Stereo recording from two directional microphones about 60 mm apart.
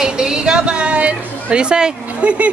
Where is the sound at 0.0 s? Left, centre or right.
Centre.